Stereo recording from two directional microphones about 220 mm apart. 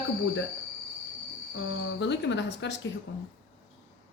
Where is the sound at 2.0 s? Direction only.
55° left (ahead or behind).